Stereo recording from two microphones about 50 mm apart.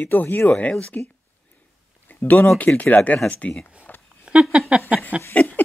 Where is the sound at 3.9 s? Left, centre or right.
Left.